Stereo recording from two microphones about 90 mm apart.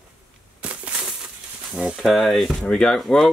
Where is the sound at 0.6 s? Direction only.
15° right (ahead or behind).